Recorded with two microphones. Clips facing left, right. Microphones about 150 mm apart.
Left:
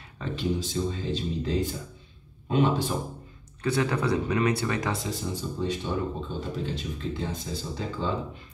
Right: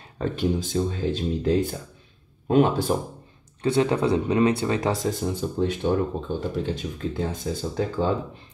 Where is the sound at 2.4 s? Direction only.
50° right (ahead or behind).